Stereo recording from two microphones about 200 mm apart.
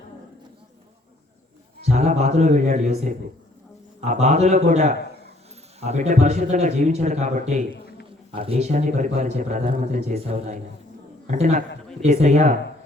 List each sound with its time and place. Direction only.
1.8 s a man's voice: 35° right (ahead or behind)
7.7 s a sound: 55° left (ahead or behind)
8.3 s a man's voice: 30° right (ahead or behind)